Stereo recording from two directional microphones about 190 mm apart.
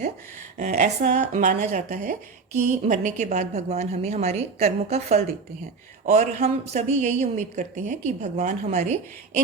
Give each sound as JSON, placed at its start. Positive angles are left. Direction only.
{"t": 0.5, "sound": "speech", "side_deg": -40}